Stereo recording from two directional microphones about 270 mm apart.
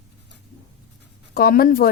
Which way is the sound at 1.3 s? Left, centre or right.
Left.